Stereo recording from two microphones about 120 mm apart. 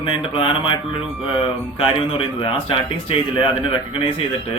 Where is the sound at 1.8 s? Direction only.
45° left (ahead or behind).